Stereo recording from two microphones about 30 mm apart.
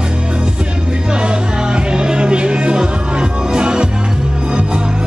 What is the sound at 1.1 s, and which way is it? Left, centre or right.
Music, right.